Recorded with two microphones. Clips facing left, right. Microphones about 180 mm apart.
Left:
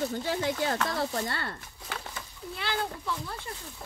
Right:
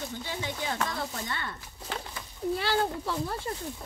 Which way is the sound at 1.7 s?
25° right (ahead or behind).